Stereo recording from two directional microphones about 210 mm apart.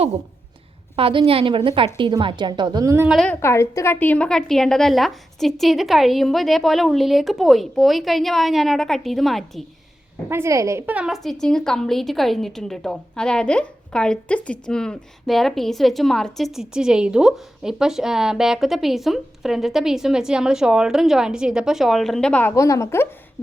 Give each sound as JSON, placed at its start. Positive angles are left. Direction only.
{"t": 0.9, "sound": "a woman's voice", "side_deg": -25}
{"t": 3.1, "sound": "a woman's voice", "side_deg": 0}
{"t": 3.4, "sound": "a woman's voice", "side_deg": 15}
{"t": 10.2, "sound": "a woman's voice", "side_deg": -10}